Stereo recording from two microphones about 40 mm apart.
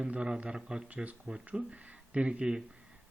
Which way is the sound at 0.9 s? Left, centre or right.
Right.